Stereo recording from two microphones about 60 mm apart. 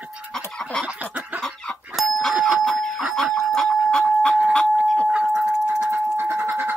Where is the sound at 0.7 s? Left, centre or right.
Centre.